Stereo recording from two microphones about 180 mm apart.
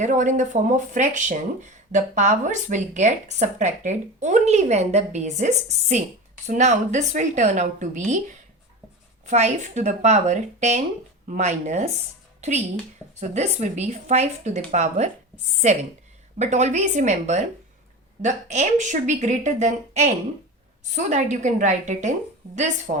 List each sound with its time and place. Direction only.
0.0 s a woman's voice: 45° right (ahead or behind)
9.2 s a woman's voice: 40° right (ahead or behind)